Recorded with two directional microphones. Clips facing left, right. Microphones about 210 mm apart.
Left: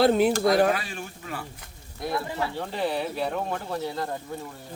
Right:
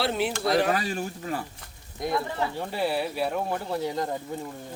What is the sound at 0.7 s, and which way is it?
Speech, 40° right (ahead or behind).